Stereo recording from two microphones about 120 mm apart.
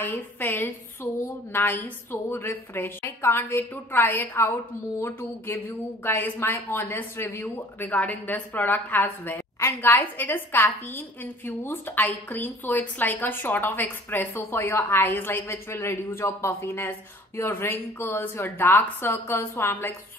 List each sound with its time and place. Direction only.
0.0 s speech: 15° left (ahead or behind)
6.0 s speech: 15° left (ahead or behind)